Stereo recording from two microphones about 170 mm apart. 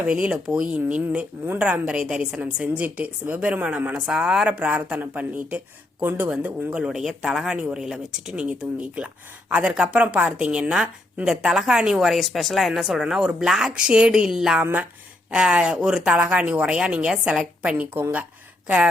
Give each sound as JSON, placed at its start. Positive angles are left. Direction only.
{"t": 0.0, "sound": "speech", "side_deg": -10}